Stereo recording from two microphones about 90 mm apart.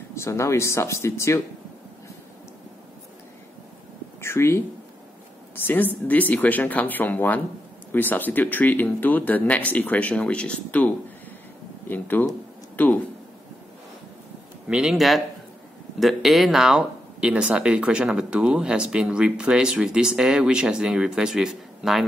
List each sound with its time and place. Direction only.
0.1 s speech: 30° left (ahead or behind)
4.2 s speech: 30° left (ahead or behind)
6.0 s speech: 20° left (ahead or behind)
11.9 s speech: 20° left (ahead or behind)
14.7 s speech: 5° right (ahead or behind)